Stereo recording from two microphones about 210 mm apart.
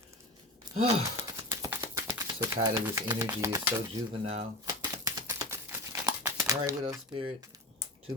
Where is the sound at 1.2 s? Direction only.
15° right (ahead or behind).